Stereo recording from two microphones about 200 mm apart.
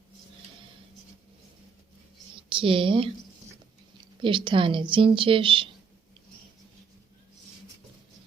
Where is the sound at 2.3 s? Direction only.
25° right (ahead or behind).